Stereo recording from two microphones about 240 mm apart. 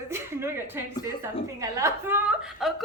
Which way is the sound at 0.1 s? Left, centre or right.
Centre.